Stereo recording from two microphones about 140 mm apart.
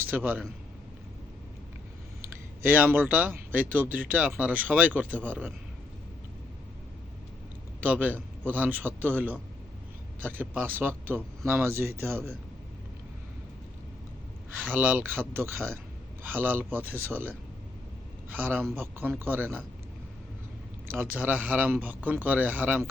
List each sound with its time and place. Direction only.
0.1 s speech: 15° right (ahead or behind)
2.6 s speech: 15° right (ahead or behind)
7.8 s speech: 10° right (ahead or behind)
14.6 s speech: 10° right (ahead or behind)
20.9 s speech: 15° right (ahead or behind)